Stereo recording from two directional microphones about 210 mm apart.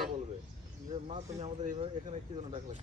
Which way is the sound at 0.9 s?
30° right (ahead or behind).